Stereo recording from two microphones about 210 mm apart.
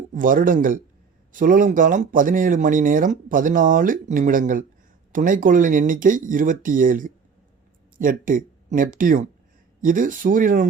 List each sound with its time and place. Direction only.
0.1 s speech: 40° right (ahead or behind)